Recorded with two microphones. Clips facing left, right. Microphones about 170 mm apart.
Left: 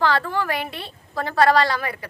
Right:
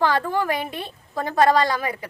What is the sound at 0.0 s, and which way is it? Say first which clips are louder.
A woman's voice: right 1 dB; 15° right (ahead or behind).